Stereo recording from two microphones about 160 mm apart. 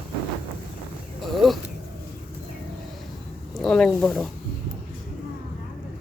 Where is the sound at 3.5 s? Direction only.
5° left (ahead or behind).